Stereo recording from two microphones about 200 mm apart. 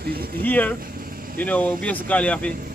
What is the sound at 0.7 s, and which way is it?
Vehicle, 45° right (ahead or behind).